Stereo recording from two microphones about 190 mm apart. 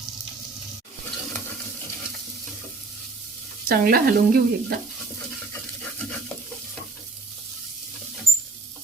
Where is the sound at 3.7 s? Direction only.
50° right (ahead or behind).